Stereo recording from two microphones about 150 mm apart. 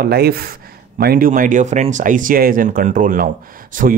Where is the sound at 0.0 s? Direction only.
90° right.